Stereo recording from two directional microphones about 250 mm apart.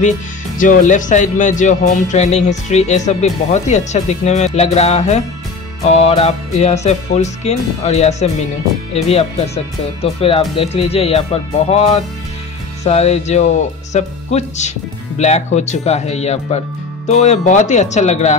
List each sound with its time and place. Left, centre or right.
0.6 s speech: left